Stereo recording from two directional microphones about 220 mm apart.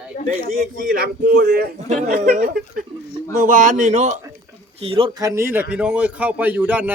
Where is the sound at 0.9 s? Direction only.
45° right (ahead or behind); by 5.3 s 25° right (ahead or behind).